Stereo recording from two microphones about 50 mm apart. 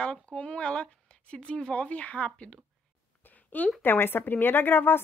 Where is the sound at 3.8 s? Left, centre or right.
Left.